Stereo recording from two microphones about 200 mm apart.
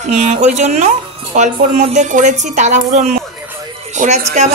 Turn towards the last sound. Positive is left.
turn(degrees=-35)  # may be behind; listen again after turning